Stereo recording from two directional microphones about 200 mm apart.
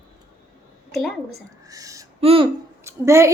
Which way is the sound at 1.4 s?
15° right (ahead or behind).